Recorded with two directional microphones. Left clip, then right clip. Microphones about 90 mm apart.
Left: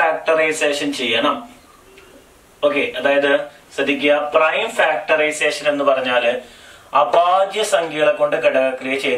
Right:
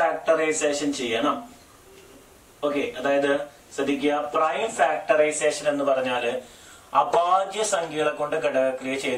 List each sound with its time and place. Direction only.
0.2 s a man's voice: centre (ahead or behind)
2.6 s speech: centre (ahead or behind); by 9.1 s 15° right (ahead or behind)